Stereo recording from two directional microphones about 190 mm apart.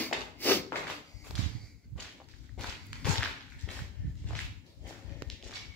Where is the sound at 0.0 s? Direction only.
10° left (ahead or behind).